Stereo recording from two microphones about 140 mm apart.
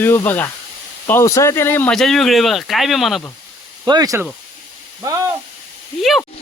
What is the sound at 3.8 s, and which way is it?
Speech, 25° right (ahead or behind).